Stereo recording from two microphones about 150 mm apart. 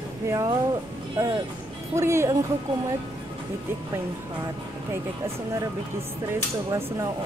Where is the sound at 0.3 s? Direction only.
20° right (ahead or behind).